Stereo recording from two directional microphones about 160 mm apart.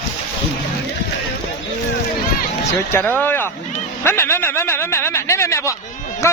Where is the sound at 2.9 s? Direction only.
10° left (ahead or behind).